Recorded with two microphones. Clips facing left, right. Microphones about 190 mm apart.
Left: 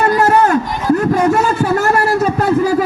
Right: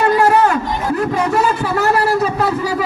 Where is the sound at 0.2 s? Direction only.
45° left (ahead or behind).